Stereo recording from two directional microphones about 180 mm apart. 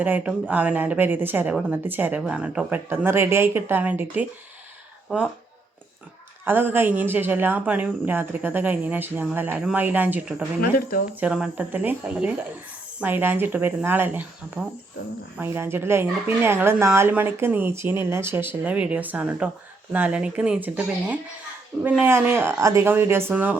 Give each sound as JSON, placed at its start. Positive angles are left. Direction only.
{"t": 0.0, "sound": "speech", "side_deg": -10}
{"t": 6.4, "sound": "speech", "side_deg": -10}
{"t": 10.6, "sound": "speech", "side_deg": 55}
{"t": 11.2, "sound": "speech", "side_deg": -5}